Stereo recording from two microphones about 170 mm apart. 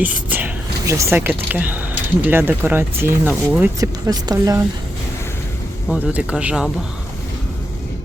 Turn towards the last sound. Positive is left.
turn(degrees=-5)  # may be behind; listen again after turning